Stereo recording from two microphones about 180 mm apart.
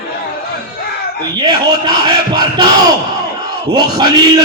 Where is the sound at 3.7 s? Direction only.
25° right (ahead or behind).